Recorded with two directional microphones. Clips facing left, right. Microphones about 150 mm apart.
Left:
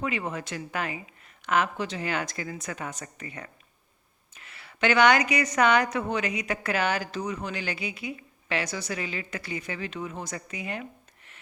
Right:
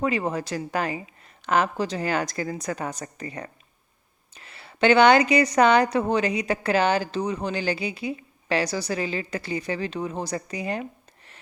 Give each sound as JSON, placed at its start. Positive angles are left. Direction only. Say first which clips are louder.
{"t": 0.0, "sound": "a woman's voice", "louder": "right 6 dB", "side_deg": -35}